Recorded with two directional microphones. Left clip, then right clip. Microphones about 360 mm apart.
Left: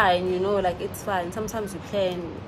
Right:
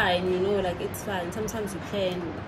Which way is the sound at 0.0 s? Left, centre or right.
Centre.